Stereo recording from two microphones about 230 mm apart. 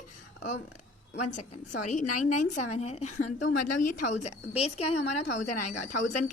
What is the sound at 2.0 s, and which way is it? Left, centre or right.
Speech, left.